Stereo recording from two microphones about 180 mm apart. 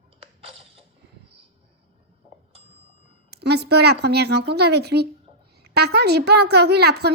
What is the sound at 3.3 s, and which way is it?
A woman's voice, 65° right (ahead or behind).